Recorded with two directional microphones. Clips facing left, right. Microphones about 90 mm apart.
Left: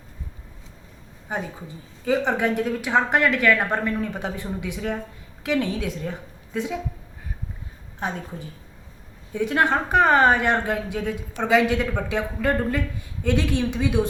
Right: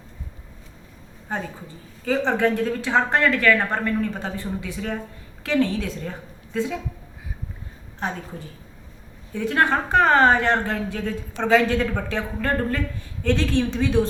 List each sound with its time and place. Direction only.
1.3 s a woman's voice: 15° left (ahead or behind)
7.9 s a woman's voice: 15° left (ahead or behind)